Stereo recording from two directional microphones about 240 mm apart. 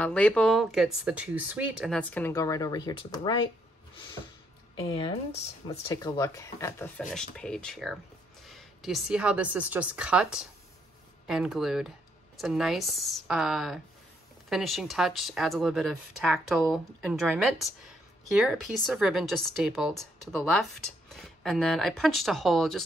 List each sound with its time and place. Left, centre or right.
0.0 s speech: centre
4.7 s speech: left; by 22.8 s centre